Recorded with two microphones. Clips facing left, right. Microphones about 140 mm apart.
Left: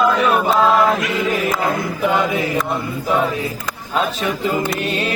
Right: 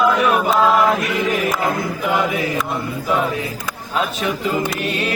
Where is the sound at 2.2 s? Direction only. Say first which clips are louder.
Left 1 dB; 20° left (ahead or behind).